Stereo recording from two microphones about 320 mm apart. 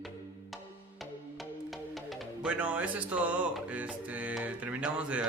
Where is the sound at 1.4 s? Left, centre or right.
Centre.